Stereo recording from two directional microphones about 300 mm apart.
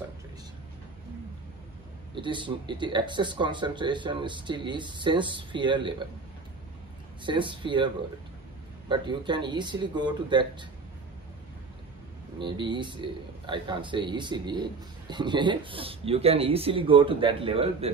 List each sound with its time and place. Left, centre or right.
2.1 s speech: centre
7.2 s speech: centre
12.4 s speech: centre